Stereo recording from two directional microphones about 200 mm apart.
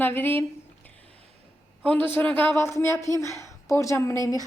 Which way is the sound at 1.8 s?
10° left (ahead or behind).